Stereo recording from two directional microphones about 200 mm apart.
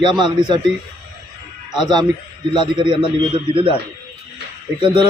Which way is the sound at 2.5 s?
25° right (ahead or behind).